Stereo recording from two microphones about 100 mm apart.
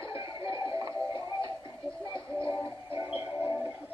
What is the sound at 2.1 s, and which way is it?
Music, 55° left (ahead or behind).